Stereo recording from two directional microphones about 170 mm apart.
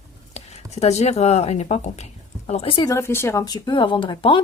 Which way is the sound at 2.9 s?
15° left (ahead or behind).